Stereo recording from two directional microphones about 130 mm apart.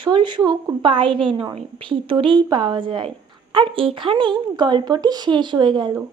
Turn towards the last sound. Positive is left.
turn(degrees=-35)  # may be behind; listen again after turning